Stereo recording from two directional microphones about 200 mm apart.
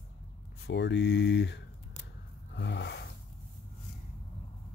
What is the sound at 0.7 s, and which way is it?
Speech, 60° left (ahead or behind).